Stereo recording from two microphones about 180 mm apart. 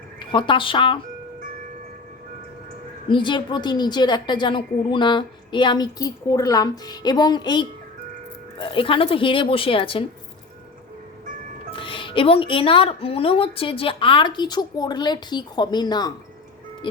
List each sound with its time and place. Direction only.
0.2 s speech: 25° left (ahead or behind)
3.1 s a woman's voice: 25° left (ahead or behind)
11.7 s a woman's voice: 30° left (ahead or behind)